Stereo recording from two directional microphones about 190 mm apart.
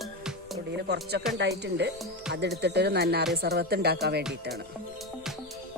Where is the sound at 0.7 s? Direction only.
60° right (ahead or behind).